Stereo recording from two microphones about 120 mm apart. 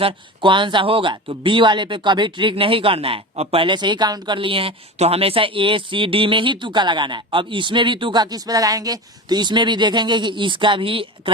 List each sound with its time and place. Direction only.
0.0 s speech: 45° right (ahead or behind)